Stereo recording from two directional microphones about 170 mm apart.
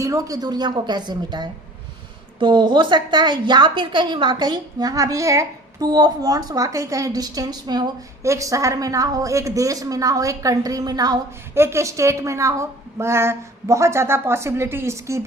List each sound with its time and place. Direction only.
0.0 s a woman's voice: 20° right (ahead or behind)